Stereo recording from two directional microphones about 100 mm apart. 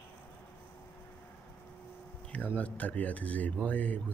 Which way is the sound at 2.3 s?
15° left (ahead or behind).